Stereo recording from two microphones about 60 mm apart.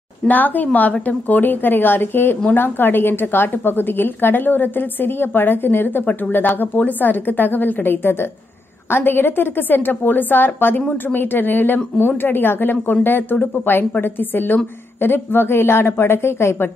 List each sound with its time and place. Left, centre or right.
0.3 s a woman's voice: left